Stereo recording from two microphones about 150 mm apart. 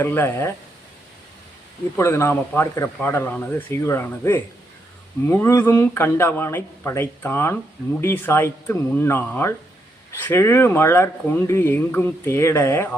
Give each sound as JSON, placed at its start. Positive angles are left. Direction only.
{"t": 0.0, "sound": "speech", "side_deg": 15}
{"t": 2.0, "sound": "speech", "side_deg": 15}